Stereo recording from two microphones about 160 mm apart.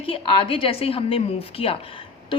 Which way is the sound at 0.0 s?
35° left (ahead or behind).